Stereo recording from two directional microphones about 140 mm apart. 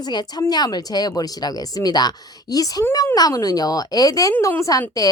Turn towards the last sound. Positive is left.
turn(degrees=25)  # may be behind; listen again after turning